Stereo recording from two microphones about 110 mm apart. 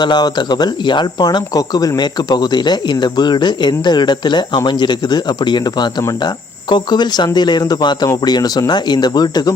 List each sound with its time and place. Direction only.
0.0 s speech: 40° left (ahead or behind)